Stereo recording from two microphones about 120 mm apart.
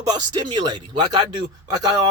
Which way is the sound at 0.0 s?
35° right (ahead or behind).